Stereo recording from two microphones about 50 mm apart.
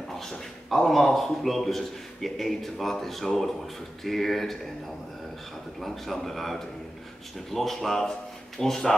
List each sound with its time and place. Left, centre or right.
0.1 s a man's voice: centre
5.8 s a man's voice: centre